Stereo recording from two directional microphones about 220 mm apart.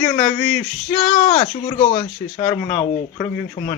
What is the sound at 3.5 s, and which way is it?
Speech, 35° left (ahead or behind).